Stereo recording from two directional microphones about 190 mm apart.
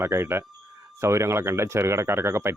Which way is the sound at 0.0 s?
15° right (ahead or behind).